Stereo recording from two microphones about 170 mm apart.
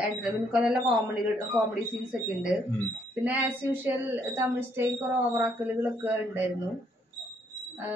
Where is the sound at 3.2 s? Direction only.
10° right (ahead or behind).